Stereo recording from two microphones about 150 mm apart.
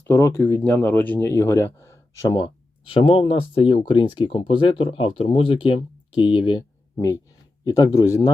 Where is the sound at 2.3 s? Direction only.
35° left (ahead or behind).